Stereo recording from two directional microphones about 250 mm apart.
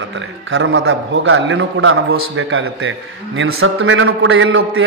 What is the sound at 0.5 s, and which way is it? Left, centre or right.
A man's voice, right.